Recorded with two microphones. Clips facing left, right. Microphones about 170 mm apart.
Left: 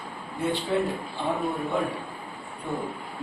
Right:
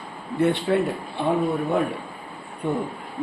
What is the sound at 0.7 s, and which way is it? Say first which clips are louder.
Speech: right 2 dB; 65° right (ahead or behind).